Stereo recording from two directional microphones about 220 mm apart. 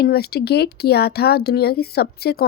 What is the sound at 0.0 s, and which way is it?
Speech, 45° left (ahead or behind).